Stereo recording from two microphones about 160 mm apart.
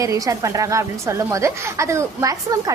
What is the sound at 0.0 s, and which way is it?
A woman's voice, 20° right (ahead or behind).